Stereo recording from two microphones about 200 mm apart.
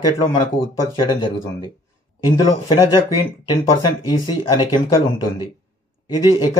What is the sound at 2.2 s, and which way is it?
Speech, 20° left (ahead or behind).